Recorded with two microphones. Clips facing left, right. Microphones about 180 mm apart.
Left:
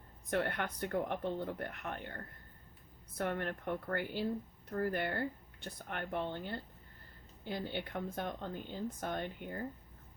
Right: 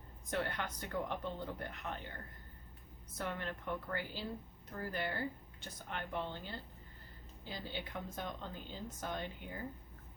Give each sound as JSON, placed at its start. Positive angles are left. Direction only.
{"t": 0.3, "sound": "speech", "side_deg": 55}